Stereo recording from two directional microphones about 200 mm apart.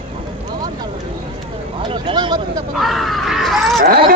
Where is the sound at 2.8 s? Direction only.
Centre (ahead or behind).